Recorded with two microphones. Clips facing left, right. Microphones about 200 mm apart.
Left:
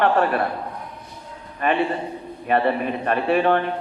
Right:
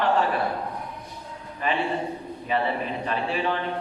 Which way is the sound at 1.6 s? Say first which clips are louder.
Left 4 dB; 60° left (ahead or behind).